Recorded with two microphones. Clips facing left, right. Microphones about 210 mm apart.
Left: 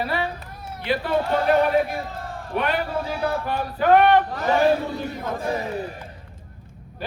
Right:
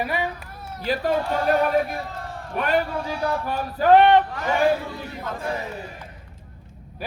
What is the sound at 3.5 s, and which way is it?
Male singing, 40° right (ahead or behind).